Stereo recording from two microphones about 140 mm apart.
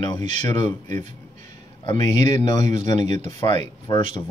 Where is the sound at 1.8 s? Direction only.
35° left (ahead or behind).